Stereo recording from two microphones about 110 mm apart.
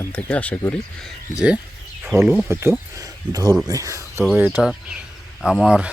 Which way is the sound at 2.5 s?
25° right (ahead or behind).